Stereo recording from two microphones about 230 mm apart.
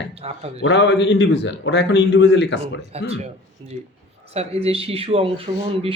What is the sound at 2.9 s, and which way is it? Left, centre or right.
Speech, right.